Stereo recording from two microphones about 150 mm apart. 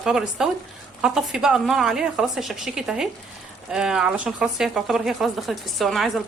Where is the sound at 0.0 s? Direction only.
5° right (ahead or behind).